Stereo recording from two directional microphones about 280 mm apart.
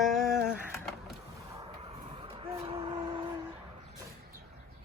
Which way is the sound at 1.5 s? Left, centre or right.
Right.